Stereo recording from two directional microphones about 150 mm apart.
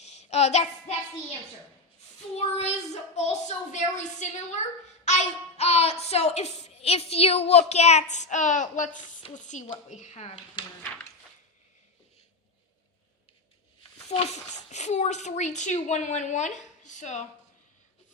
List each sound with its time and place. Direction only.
0.0 s child singing: 45° left (ahead or behind)
2.3 s a woman's voice: 45° left (ahead or behind)
14.1 s a woman's voice: 45° left (ahead or behind)